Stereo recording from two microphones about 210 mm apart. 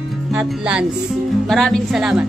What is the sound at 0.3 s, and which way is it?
Speech, 5° right (ahead or behind).